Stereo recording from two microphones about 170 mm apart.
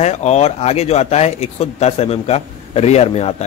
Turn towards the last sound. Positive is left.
turn(degrees=35)  # may be behind; listen again after turning